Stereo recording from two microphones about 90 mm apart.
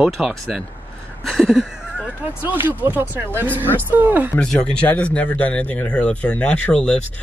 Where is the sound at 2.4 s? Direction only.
20° right (ahead or behind).